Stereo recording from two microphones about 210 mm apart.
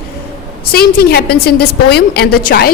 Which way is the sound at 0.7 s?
45° left (ahead or behind).